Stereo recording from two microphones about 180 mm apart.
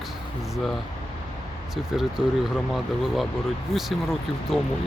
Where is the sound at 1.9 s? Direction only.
Centre (ahead or behind).